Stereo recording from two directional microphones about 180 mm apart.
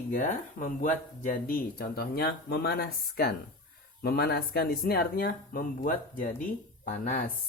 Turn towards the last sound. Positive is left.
turn(degrees=55)  # may be behind; listen again after turning